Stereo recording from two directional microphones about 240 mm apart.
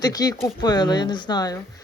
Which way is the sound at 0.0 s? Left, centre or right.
Centre.